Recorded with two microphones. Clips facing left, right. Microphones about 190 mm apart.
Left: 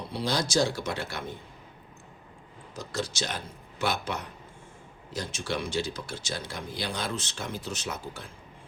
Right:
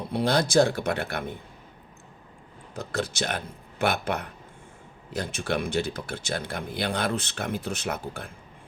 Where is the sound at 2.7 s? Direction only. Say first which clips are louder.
Right 3 dB; 60° right (ahead or behind).